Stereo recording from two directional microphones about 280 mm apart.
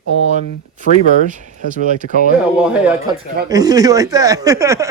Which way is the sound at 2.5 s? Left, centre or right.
Centre.